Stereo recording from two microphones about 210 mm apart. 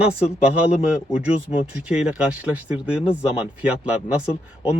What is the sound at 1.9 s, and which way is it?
Speech, 5° right (ahead or behind).